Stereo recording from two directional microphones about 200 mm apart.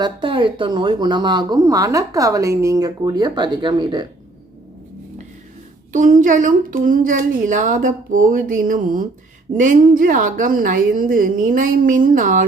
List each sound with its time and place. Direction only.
0.0 s speech: 25° right (ahead or behind)
5.9 s a woman's voice: 40° right (ahead or behind)